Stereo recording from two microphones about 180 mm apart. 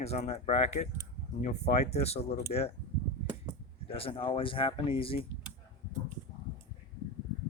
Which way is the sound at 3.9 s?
30° left (ahead or behind).